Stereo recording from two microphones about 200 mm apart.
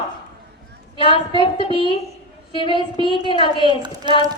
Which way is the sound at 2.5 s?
25° left (ahead or behind).